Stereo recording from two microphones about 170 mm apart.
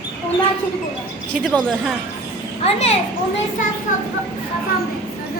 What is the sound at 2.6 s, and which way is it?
Speech, 40° left (ahead or behind).